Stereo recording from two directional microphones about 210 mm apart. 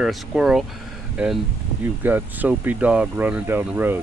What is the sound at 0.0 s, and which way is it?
Speech, centre (ahead or behind).